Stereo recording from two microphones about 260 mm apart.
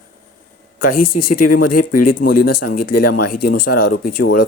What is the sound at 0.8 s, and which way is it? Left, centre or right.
Speech, left.